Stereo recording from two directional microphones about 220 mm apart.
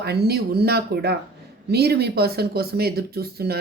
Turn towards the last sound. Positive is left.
turn(degrees=-45)  # may be behind; listen again after turning